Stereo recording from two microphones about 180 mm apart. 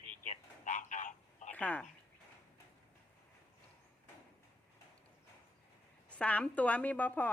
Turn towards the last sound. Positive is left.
turn(degrees=10)  # may be behind; listen again after turning